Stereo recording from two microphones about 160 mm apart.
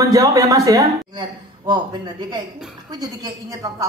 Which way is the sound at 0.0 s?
20° right (ahead or behind).